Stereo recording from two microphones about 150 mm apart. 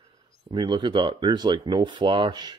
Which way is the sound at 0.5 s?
30° right (ahead or behind).